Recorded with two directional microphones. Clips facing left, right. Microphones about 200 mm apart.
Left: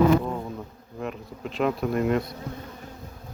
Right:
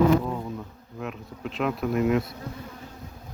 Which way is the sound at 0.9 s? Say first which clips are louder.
Left 2 dB; centre (ahead or behind).